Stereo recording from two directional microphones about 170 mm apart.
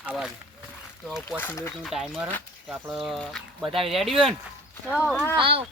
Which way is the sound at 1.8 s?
Centre (ahead or behind).